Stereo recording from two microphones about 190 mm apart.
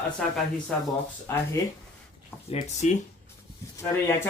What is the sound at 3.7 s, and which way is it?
Speech, 15° left (ahead or behind).